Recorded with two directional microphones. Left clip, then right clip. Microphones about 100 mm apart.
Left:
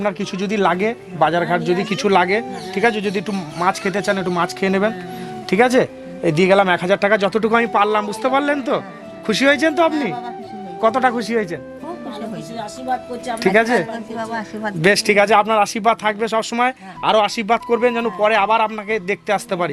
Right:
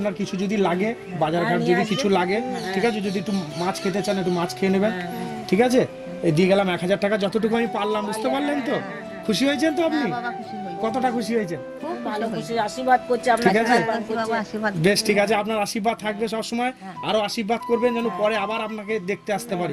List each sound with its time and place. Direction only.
0.0 s a man's voice: 20° left (ahead or behind)
13.4 s a man's voice: 20° left (ahead or behind)
14.3 s a man's voice: 10° left (ahead or behind)
14.8 s a man's voice: 20° left (ahead or behind)